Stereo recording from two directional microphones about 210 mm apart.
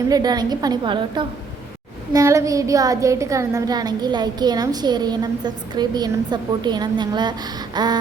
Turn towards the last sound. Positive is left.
turn(degrees=-20)  # may be behind; listen again after turning